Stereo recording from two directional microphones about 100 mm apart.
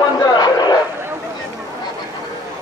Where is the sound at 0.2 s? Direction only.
45° left (ahead or behind).